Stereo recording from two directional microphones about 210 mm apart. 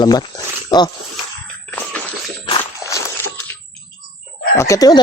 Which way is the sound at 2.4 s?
20° left (ahead or behind).